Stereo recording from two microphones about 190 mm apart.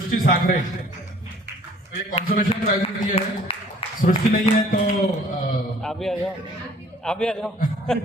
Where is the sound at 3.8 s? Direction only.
30° left (ahead or behind).